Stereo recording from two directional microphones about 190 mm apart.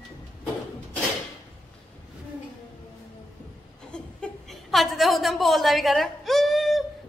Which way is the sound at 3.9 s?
5° left (ahead or behind).